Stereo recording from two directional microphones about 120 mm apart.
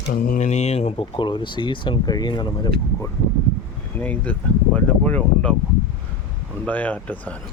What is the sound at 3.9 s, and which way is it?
Speech, 15° left (ahead or behind).